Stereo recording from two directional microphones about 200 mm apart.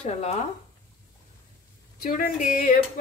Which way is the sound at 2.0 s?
45° left (ahead or behind).